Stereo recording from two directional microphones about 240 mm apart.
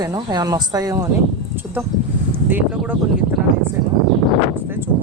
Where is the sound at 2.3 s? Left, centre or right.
Centre.